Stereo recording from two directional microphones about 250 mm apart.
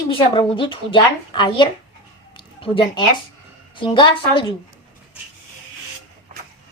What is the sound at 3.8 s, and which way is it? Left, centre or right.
Speech, centre.